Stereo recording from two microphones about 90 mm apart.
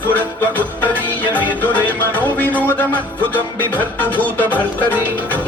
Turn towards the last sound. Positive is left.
turn(degrees=20)  # may be behind; listen again after turning